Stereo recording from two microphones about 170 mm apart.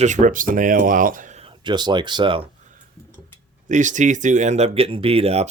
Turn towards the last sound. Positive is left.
turn(degrees=-35)  # may be behind; listen again after turning